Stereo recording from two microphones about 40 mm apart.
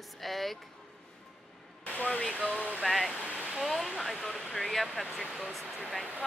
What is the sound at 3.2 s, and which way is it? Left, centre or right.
Waterfall, right.